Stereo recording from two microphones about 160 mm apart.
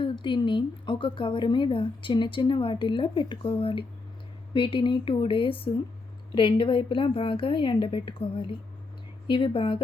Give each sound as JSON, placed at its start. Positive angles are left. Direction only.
{"t": 0.0, "sound": "a woman's voice", "side_deg": 30}